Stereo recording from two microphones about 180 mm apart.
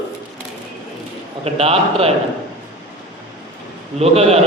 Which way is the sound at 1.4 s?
35° right (ahead or behind).